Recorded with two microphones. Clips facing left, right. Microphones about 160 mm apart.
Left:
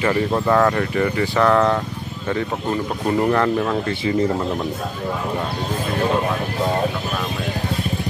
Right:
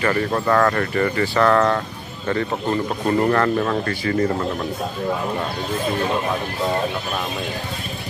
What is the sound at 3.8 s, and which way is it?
Speech, 15° left (ahead or behind).